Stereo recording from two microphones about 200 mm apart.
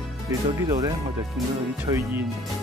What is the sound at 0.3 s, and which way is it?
Speech, 15° right (ahead or behind).